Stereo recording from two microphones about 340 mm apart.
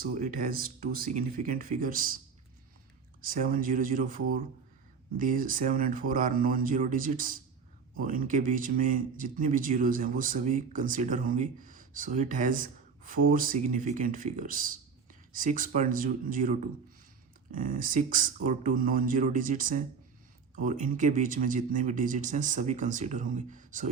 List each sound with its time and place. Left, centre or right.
0.0 s a man's voice: right
3.2 s a man's voice: right